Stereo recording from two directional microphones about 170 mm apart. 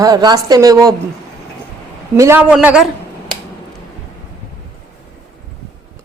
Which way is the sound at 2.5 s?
5° right (ahead or behind).